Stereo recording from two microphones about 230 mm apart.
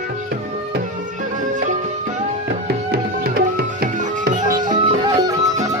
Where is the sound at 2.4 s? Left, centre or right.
Right.